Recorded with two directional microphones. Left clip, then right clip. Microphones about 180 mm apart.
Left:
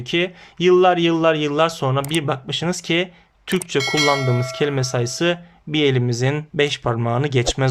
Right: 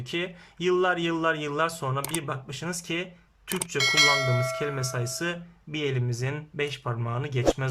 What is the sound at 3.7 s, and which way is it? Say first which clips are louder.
Speech: left 3 dB; centre (ahead or behind).